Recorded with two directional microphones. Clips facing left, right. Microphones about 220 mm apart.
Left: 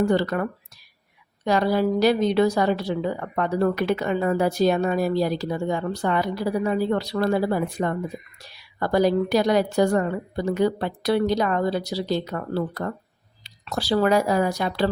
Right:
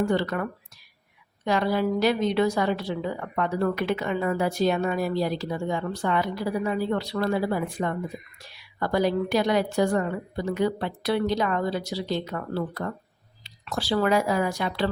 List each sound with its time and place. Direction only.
0.0 s a woman's voice: 40° left (ahead or behind)
1.5 s a woman's voice: 40° left (ahead or behind)